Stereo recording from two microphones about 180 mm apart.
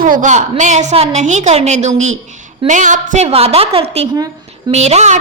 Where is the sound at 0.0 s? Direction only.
45° right (ahead or behind).